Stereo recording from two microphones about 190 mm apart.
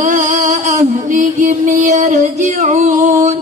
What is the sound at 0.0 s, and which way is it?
Music, 40° right (ahead or behind).